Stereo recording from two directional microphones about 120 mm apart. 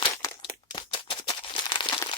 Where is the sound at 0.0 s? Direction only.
40° left (ahead or behind).